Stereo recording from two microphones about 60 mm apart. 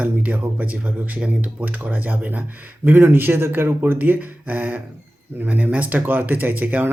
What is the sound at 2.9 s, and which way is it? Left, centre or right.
Speech, right.